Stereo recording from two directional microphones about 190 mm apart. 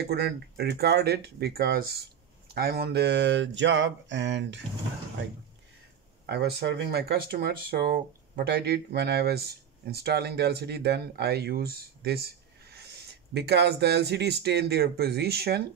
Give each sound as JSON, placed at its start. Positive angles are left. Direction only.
{"t": 0.1, "sound": "speech", "side_deg": -60}
{"t": 2.5, "sound": "a sound", "side_deg": -55}
{"t": 6.2, "sound": "speech", "side_deg": -60}